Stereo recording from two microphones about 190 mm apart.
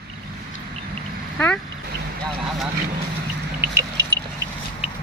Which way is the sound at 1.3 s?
5° left (ahead or behind).